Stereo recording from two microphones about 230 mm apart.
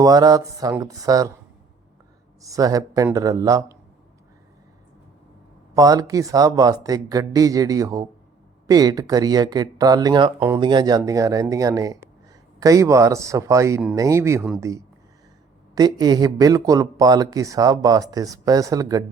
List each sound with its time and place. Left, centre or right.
0.0 s speech: centre
2.4 s speech: centre
5.7 s speech: centre